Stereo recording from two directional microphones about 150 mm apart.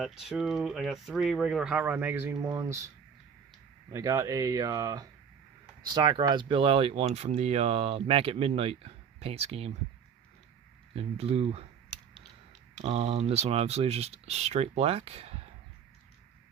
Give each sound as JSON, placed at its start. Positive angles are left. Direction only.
{"t": 0.0, "sound": "speech", "side_deg": 0}
{"t": 3.9, "sound": "speech", "side_deg": -20}
{"t": 10.9, "sound": "speech", "side_deg": -40}
{"t": 12.8, "sound": "speech", "side_deg": -45}